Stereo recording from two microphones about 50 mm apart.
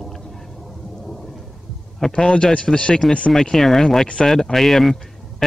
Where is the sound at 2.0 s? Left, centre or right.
Centre.